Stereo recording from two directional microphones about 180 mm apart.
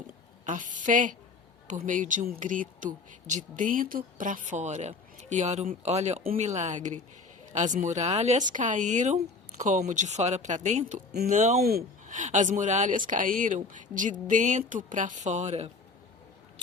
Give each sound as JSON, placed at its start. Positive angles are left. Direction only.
{"t": 0.1, "sound": "a woman's voice", "side_deg": -45}
{"t": 11.6, "sound": "speech", "side_deg": -55}